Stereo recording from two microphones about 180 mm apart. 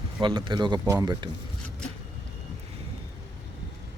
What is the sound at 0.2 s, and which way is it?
Speech, 25° right (ahead or behind).